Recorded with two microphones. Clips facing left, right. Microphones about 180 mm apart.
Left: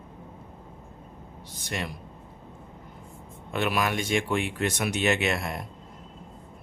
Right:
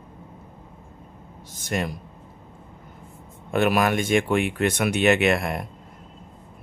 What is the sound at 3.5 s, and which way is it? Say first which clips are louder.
Speech: right 6 dB; 50° right (ahead or behind).